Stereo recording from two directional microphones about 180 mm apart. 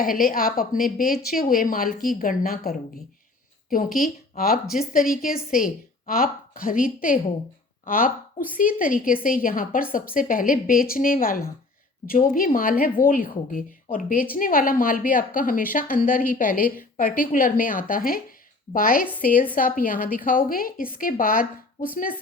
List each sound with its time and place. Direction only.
0.0 s a woman's voice: 50° left (ahead or behind)